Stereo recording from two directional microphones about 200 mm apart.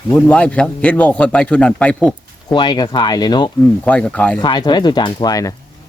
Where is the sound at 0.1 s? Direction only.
5° left (ahead or behind).